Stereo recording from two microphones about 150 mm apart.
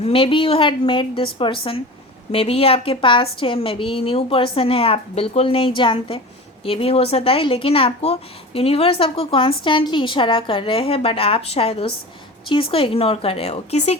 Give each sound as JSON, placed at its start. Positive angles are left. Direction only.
{"t": 0.0, "sound": "speech", "side_deg": 40}